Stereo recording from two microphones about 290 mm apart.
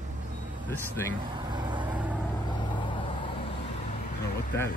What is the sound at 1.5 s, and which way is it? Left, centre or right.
Vehicle, centre.